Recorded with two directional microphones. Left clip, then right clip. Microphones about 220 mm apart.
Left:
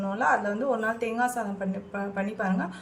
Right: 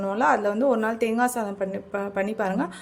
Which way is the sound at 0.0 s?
40° right (ahead or behind).